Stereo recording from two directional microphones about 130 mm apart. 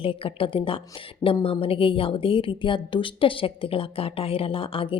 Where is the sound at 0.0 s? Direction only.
45° left (ahead or behind).